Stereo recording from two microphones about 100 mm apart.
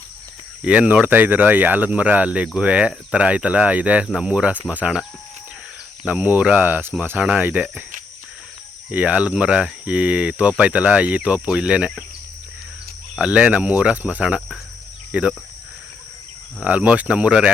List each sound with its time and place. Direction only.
0.6 s speech: 10° right (ahead or behind)
6.1 s speech: 15° right (ahead or behind)
8.9 s speech: 15° right (ahead or behind)
13.1 s speech: 10° right (ahead or behind)
16.6 s speech: 15° right (ahead or behind)